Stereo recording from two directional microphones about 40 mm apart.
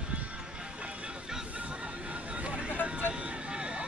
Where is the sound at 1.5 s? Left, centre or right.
Right.